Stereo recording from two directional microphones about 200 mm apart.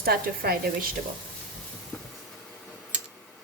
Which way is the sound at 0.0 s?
50° right (ahead or behind).